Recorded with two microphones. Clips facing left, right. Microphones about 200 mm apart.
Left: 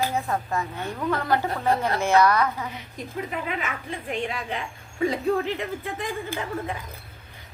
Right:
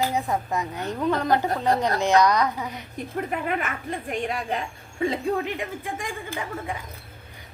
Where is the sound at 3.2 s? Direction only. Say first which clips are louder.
Right 3 dB; 50° right (ahead or behind).